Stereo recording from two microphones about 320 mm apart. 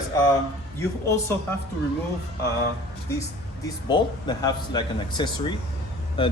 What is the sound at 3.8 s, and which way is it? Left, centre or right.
Speech, centre.